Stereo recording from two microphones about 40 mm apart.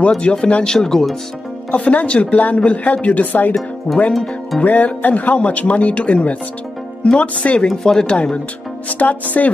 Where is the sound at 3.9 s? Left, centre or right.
Left.